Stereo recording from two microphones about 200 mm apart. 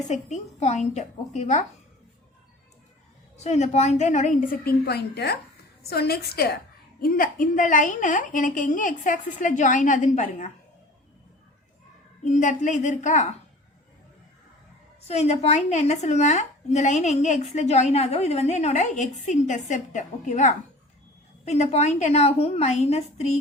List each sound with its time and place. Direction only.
0.1 s a woman's voice: 35° left (ahead or behind)
3.4 s a woman's voice: 35° left (ahead or behind)
12.2 s a woman's voice: 40° left (ahead or behind)
15.0 s a woman's voice: 35° left (ahead or behind)